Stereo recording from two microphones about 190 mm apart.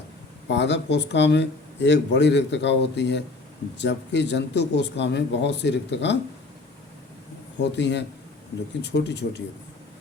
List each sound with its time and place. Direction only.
0.4 s speech: 70° left (ahead or behind)
7.6 s speech: 65° left (ahead or behind)